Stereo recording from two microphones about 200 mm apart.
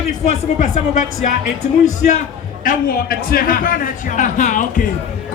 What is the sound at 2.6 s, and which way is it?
A man's voice, 50° left (ahead or behind).